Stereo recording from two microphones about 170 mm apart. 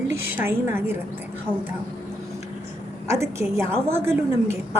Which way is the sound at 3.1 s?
15° right (ahead or behind).